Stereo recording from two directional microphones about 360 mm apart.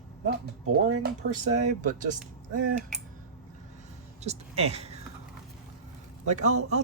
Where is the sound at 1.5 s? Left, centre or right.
Centre.